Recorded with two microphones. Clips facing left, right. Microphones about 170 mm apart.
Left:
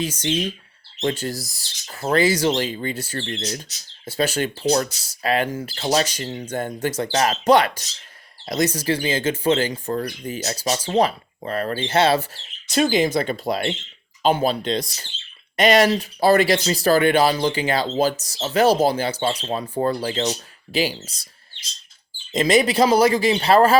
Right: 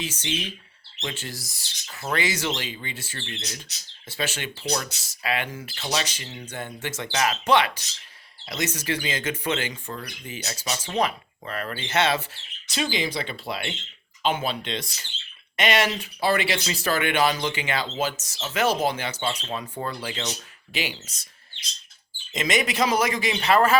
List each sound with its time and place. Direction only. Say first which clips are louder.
0.0 s speech: left 7 dB; 45° left (ahead or behind)
12.7 s speech: left 9 dB; 45° left (ahead or behind)
22.3 s speech: left 8 dB; 35° left (ahead or behind)